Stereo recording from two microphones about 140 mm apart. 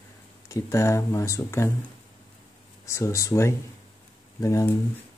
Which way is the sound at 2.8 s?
20° left (ahead or behind).